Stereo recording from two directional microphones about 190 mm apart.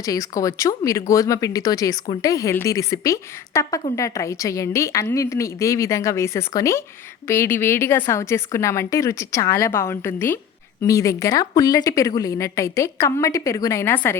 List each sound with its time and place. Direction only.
0.0 s a woman's voice: 15° left (ahead or behind)